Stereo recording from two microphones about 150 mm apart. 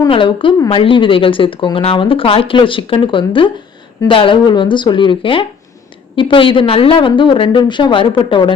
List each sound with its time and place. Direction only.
0.1 s speech: 35° left (ahead or behind)